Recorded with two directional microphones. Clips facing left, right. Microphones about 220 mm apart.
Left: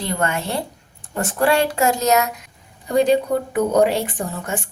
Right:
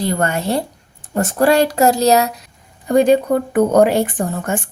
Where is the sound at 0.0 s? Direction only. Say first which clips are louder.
Right 4 dB; 40° right (ahead or behind).